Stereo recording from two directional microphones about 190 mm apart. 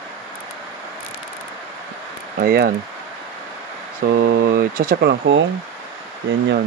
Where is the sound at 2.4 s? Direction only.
55° right (ahead or behind).